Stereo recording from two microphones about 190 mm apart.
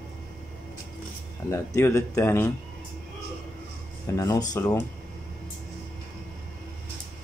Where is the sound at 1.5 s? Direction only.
15° left (ahead or behind).